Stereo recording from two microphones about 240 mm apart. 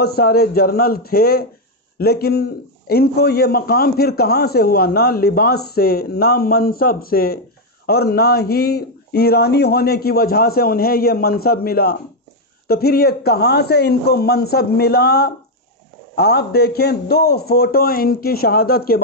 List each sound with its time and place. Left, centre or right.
0.0 s a man's voice: left